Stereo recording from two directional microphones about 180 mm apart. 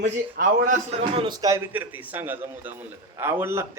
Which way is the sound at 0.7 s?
35° right (ahead or behind).